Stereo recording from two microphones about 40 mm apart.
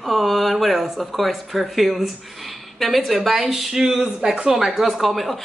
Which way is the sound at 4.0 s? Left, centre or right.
Right.